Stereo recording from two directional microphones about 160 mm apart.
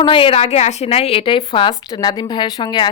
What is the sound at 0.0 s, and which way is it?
A woman's voice, 35° left (ahead or behind).